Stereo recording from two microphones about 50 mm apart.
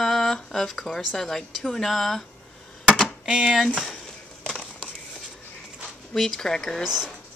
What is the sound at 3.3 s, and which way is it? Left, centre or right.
Speech, centre.